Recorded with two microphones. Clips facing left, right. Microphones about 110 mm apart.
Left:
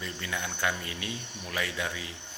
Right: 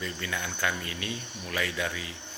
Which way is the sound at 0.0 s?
15° left (ahead or behind).